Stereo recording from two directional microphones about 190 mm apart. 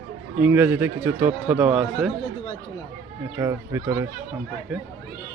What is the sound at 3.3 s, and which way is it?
Speech, 15° right (ahead or behind).